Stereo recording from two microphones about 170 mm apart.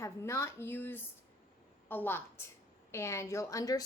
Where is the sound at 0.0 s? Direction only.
15° left (ahead or behind).